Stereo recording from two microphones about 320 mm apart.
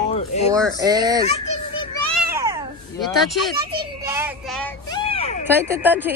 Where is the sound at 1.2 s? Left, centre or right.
Centre.